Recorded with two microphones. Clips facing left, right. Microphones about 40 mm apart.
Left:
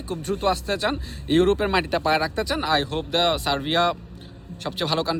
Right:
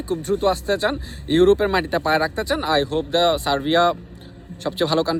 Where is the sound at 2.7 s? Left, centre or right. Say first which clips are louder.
Right 4 dB; left.